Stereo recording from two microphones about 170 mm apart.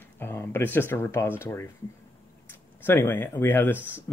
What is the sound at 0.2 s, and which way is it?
Speech, 15° left (ahead or behind).